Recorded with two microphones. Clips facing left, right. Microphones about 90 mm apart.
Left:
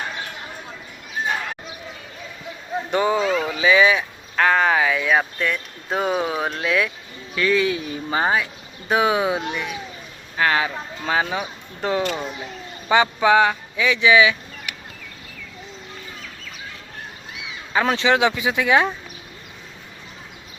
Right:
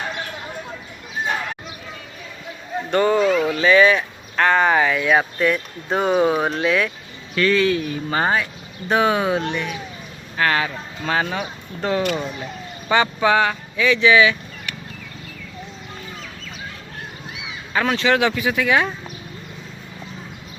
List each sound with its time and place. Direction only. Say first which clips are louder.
2.9 s speech: right 3 dB; 10° left (ahead or behind)
12.1 s speech: right 2 dB; centre (ahead or behind)
12.9 s speech: left 1 dB; 15° left (ahead or behind)
17.8 s speech: even; 20° left (ahead or behind)